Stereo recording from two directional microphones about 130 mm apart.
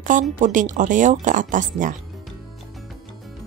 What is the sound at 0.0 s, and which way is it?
Speech, 80° right.